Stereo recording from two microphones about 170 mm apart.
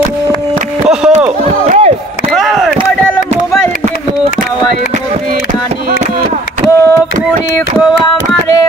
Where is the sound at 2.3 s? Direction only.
Centre (ahead or behind).